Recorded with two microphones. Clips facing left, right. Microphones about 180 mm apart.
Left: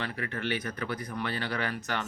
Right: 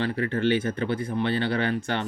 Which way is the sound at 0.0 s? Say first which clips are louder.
Right 10 dB; 30° right (ahead or behind).